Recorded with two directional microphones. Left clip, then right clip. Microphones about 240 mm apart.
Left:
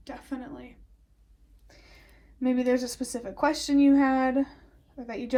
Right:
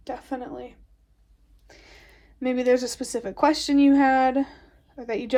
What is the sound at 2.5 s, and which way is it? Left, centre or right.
A woman's voice, right.